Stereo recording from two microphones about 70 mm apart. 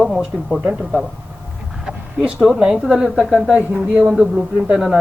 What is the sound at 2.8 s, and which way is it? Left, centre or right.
Speech, centre.